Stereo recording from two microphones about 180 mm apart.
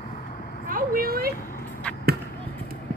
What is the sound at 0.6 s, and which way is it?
Vehicle, 50° right (ahead or behind).